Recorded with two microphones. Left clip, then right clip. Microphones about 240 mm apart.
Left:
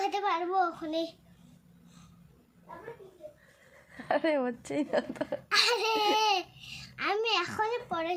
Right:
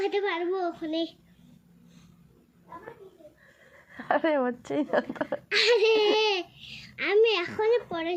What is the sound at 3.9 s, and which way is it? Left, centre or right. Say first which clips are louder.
Speech: right 3 dB; centre.